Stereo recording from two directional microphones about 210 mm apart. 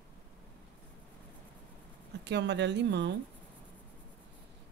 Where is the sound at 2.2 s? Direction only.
55° right (ahead or behind).